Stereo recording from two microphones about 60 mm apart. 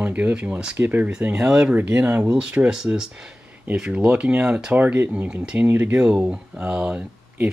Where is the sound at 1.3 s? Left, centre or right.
Centre.